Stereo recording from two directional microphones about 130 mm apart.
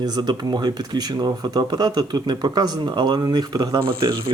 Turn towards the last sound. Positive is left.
turn(degrees=-25)  # may be behind; listen again after turning